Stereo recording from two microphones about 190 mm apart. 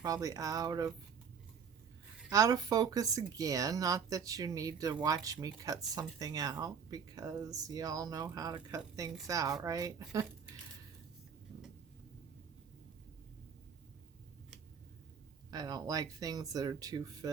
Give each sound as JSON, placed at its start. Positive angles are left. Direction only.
{"t": 0.0, "sound": "speech", "side_deg": -20}
{"t": 2.3, "sound": "a woman's voice", "side_deg": -20}
{"t": 15.4, "sound": "speech", "side_deg": -20}